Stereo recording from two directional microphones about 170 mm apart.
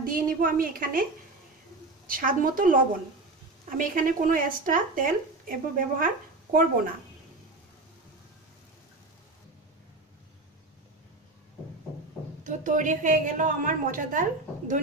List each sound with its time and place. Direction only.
0.0 s speech: 55° right (ahead or behind)
2.0 s speech: 55° right (ahead or behind)
12.4 s a woman's voice: 50° right (ahead or behind)